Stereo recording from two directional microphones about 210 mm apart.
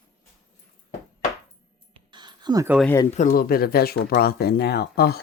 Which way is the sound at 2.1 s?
20° right (ahead or behind).